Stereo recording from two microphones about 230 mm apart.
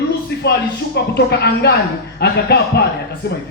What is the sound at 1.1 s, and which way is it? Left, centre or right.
Speech, left.